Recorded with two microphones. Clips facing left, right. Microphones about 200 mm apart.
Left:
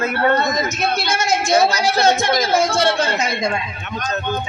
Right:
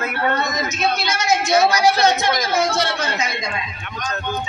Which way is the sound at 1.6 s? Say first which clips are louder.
Even; 25° left (ahead or behind).